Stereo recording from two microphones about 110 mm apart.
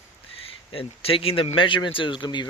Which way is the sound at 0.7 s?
55° left (ahead or behind).